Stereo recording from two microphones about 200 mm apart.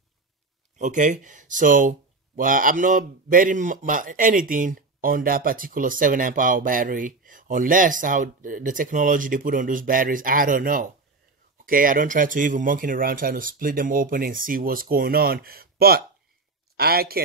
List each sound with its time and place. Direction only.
0.7 s speech: 40° right (ahead or behind)